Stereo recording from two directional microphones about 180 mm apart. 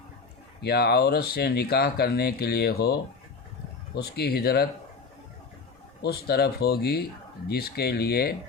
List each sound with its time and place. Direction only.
0.6 s speech: 65° left (ahead or behind)
6.0 s speech: 60° left (ahead or behind)